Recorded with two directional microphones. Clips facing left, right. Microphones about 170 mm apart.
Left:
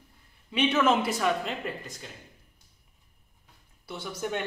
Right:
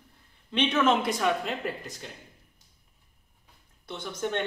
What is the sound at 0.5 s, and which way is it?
A man's voice, 5° left (ahead or behind).